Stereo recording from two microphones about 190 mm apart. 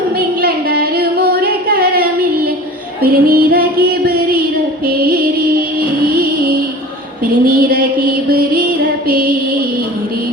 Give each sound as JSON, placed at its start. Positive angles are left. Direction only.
{"t": 0.2, "sound": "singing", "side_deg": -50}
{"t": 3.0, "sound": "child singing", "side_deg": -50}
{"t": 5.8, "sound": "music", "side_deg": -50}
{"t": 7.4, "sound": "music", "side_deg": -50}
{"t": 9.0, "sound": "child singing", "side_deg": -50}